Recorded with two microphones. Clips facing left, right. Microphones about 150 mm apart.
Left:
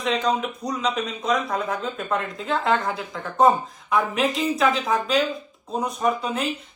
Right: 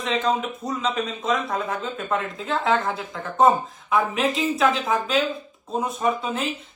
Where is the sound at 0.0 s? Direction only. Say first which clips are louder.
Even; centre (ahead or behind).